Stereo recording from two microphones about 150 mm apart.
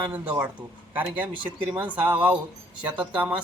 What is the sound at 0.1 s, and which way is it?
Speech, 10° right (ahead or behind).